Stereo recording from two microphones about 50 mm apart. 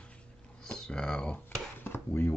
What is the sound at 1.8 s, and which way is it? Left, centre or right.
Speech, left.